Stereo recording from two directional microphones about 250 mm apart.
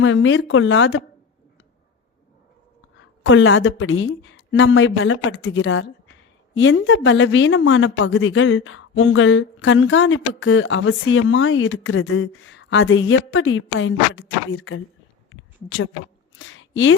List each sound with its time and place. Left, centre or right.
0.0 s a woman's voice: left
3.2 s a woman's voice: left
15.3 s a sound: left